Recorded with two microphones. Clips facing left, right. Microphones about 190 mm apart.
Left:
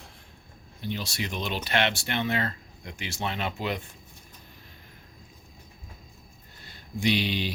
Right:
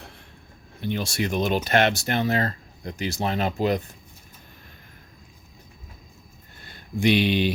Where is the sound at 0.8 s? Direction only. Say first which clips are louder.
Right 6 dB; 55° right (ahead or behind); by 3.8 s 40° right (ahead or behind).